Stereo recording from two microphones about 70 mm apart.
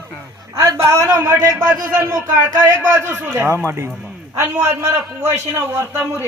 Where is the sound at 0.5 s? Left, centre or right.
Right.